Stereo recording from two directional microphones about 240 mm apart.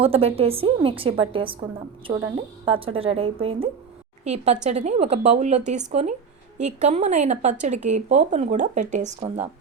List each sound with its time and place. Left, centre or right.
0.0 s a woman's voice: right